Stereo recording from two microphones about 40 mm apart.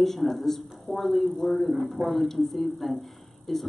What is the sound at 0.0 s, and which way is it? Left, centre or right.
A man's voice, centre.